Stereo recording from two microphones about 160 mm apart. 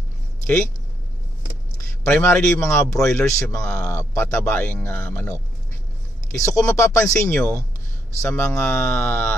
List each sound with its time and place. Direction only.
1.8 s speech: 15° left (ahead or behind)